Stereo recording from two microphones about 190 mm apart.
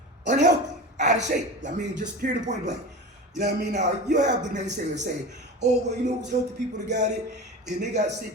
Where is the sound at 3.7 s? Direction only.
40° right (ahead or behind).